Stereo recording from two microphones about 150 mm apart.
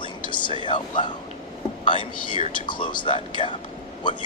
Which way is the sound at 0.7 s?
30° left (ahead or behind).